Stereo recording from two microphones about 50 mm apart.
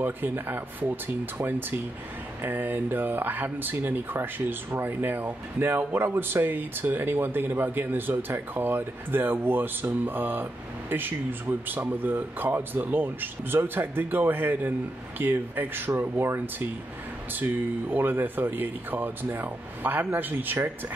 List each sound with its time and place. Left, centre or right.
0.0 s speech: right
16.0 s speech: right
17.4 s speech: right